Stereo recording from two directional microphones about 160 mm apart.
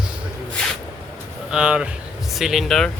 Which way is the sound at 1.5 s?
5° right (ahead or behind).